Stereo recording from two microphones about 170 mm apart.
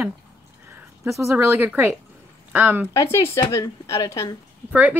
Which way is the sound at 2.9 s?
15° left (ahead or behind).